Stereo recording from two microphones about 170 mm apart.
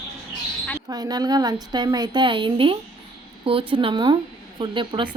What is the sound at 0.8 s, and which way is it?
Speech, 20° right (ahead or behind).